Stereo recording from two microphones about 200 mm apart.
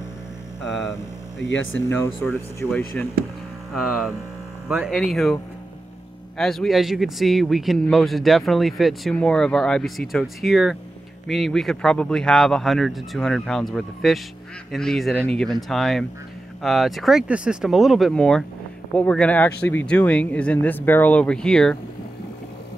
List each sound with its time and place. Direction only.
1.5 s speech: 75° left (ahead or behind)
1.9 s speech: 10° left (ahead or behind)
3.7 s a man's voice: centre (ahead or behind)